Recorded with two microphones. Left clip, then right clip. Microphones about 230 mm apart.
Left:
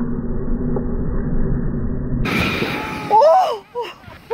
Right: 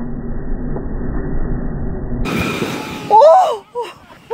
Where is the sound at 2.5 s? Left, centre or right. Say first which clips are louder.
Even; right.